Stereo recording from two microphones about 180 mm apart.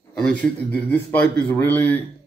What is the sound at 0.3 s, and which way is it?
Speech, 10° left (ahead or behind).